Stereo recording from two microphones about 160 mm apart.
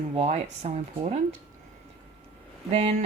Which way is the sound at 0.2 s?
45° right (ahead or behind).